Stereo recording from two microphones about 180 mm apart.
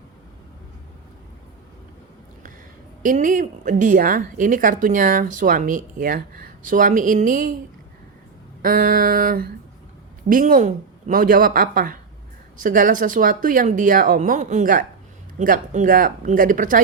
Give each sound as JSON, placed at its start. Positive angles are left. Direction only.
{"t": 3.0, "sound": "a woman's voice", "side_deg": -45}
{"t": 8.6, "sound": "a woman's voice", "side_deg": -55}